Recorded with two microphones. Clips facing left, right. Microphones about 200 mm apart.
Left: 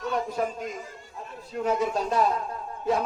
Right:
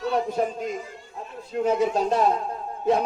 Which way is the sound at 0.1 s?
30° right (ahead or behind).